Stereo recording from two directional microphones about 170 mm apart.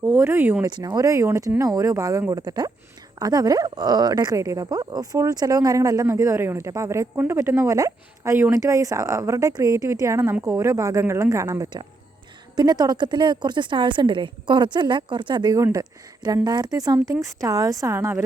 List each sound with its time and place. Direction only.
0.0 s speech: 15° right (ahead or behind)
0.6 s speech: 25° right (ahead or behind)